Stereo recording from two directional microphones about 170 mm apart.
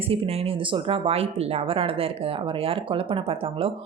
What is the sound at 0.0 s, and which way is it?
A woman's voice, 35° right (ahead or behind).